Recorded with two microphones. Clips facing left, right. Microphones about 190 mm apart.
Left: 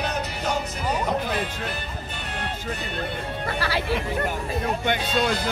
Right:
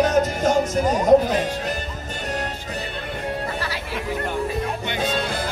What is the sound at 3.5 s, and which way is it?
Music, 70° left (ahead or behind).